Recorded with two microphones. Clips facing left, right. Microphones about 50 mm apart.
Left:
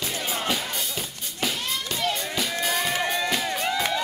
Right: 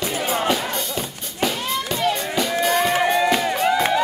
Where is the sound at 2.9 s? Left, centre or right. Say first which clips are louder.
Right 7 dB; centre.